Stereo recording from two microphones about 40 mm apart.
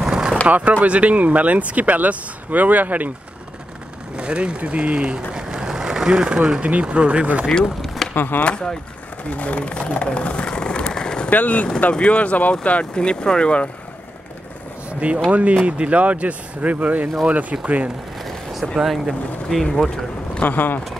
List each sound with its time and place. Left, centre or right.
0.1 s vehicle: centre
0.5 s speech: right
4.2 s speech: right
7.8 s a sound: centre
8.1 s speech: left
8.5 s speech: left
9.3 s vehicle: left; by 11.2 s centre
11.2 s speech: left
12.9 s speech: left
15.0 s speech: right
18.8 s speech: centre
19.6 s speech: centre
20.4 s speech: left